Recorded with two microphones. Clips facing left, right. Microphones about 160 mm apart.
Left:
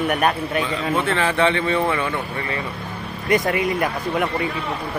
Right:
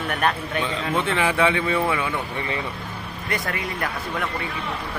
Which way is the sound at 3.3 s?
20° left (ahead or behind).